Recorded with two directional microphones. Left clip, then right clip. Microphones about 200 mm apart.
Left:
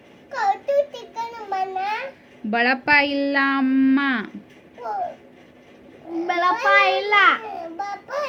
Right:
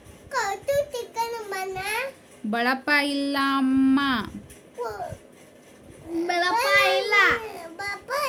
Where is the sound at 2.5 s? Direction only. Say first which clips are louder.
Left 5 dB; 15° right (ahead or behind).